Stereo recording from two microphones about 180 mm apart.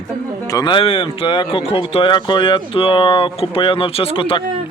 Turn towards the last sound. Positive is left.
turn(degrees=30)  # may be behind; listen again after turning